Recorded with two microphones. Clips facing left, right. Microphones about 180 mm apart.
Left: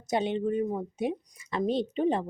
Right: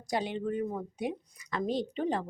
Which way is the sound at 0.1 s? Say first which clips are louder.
Left 4 dB; 25° left (ahead or behind).